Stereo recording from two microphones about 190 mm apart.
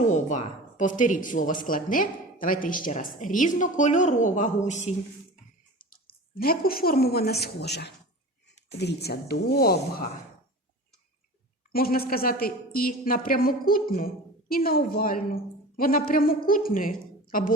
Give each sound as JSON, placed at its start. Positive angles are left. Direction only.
{"t": 0.1, "sound": "speech", "side_deg": 40}
{"t": 6.4, "sound": "speech", "side_deg": 50}
{"t": 11.7, "sound": "speech", "side_deg": 50}